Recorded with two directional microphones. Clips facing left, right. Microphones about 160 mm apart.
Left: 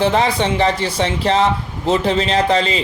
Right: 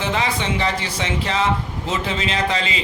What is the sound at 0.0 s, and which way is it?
Speech, 35° left (ahead or behind).